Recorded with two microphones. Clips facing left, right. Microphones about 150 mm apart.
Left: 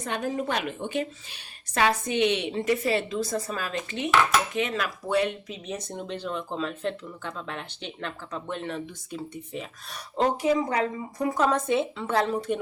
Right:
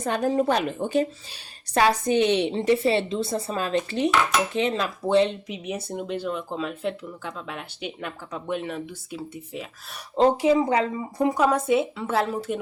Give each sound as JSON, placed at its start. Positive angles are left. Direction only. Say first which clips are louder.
{"t": 0.0, "sound": "a woman's voice", "louder": "right 6 dB", "side_deg": -35}
{"t": 5.6, "sound": "speech", "louder": "right 4 dB", "side_deg": -10}
{"t": 10.2, "sound": "speech", "louder": "right 5 dB", "side_deg": -25}
{"t": 11.3, "sound": "speech", "louder": "right 1 dB", "side_deg": -5}